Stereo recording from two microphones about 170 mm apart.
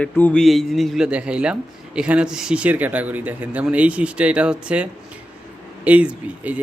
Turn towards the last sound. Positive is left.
turn(degrees=-10)  # may be behind; listen again after turning